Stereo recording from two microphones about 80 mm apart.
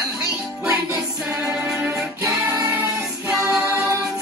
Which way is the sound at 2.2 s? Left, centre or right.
Right.